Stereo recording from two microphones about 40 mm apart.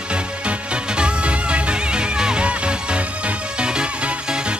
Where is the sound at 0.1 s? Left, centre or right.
Right.